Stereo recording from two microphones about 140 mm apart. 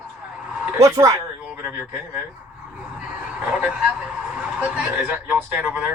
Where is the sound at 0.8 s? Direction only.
25° right (ahead or behind).